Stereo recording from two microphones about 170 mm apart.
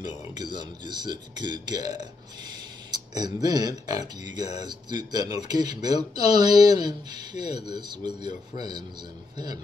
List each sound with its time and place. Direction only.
0.4 s speech: 25° right (ahead or behind)